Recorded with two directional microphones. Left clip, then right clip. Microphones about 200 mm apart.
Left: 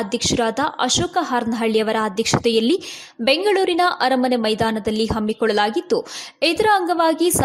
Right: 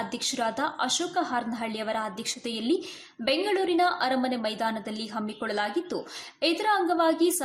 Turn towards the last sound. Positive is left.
turn(degrees=35)  # may be behind; listen again after turning